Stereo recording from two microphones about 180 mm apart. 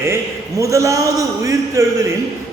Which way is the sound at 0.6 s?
15° right (ahead or behind).